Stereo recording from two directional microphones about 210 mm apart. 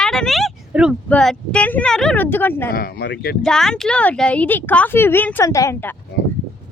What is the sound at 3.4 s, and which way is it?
Speech, centre (ahead or behind).